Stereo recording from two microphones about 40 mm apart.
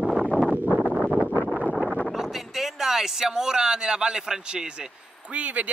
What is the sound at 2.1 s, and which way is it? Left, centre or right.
Speech, centre.